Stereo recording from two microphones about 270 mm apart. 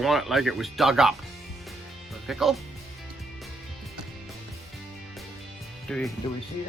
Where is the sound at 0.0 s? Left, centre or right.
Centre.